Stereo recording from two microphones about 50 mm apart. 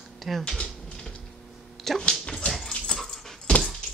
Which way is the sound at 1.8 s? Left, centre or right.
Centre.